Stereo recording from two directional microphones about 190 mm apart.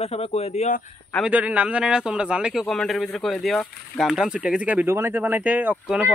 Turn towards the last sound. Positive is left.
turn(degrees=-5)  # may be behind; listen again after turning